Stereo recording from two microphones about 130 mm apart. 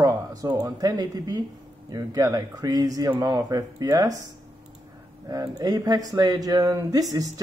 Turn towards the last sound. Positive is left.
turn(degrees=-30)  # may be behind; listen again after turning